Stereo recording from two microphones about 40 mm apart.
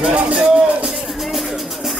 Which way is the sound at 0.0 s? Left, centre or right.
Right.